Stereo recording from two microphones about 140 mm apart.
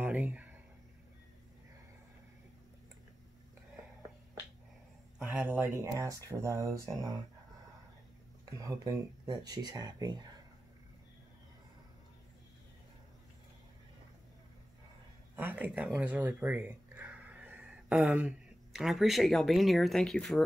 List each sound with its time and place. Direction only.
0.0 s a sound: 10° right (ahead or behind)
5.2 s speech: 15° right (ahead or behind)
8.5 s speech: 25° right (ahead or behind)
15.3 s speech: 10° right (ahead or behind)